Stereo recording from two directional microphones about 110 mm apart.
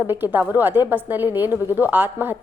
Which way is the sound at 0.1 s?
20° right (ahead or behind).